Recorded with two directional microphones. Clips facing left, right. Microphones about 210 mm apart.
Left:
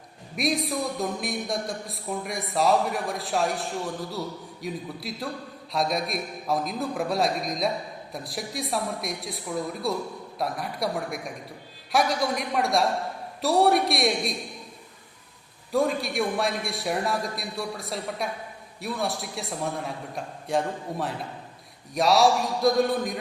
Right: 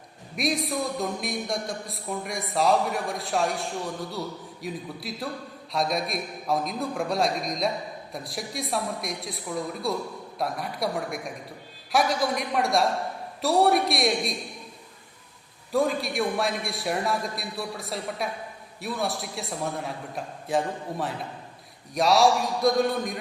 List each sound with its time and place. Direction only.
0.3 s a man's voice: centre (ahead or behind)
15.7 s a man's voice: centre (ahead or behind)